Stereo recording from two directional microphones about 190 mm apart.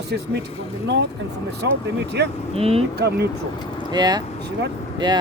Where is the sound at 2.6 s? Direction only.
30° right (ahead or behind).